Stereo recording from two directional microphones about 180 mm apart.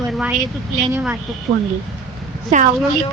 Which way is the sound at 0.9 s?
10° right (ahead or behind).